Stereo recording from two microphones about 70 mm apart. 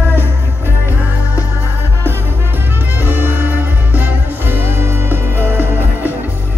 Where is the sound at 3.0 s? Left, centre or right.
Right.